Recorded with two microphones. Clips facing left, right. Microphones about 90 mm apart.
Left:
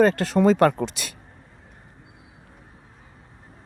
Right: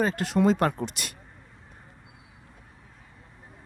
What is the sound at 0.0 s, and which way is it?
Speech, 85° left.